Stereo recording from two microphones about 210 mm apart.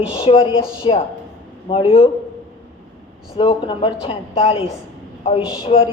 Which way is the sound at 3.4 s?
25° left (ahead or behind).